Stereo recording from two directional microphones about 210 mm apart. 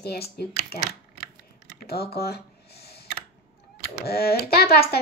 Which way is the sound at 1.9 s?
45° left (ahead or behind).